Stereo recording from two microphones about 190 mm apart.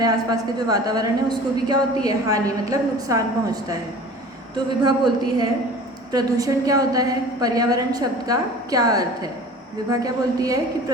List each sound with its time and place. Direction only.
0.0 s a woman's voice: 20° right (ahead or behind)